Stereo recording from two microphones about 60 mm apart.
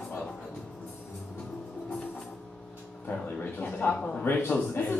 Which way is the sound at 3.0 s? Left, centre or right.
Left.